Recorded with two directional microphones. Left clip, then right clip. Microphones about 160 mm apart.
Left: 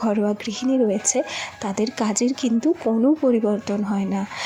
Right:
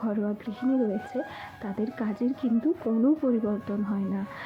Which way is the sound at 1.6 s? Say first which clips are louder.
Left 8 dB; 25° left (ahead or behind).